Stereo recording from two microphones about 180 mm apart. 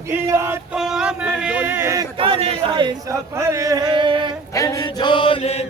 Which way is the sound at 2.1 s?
30° right (ahead or behind).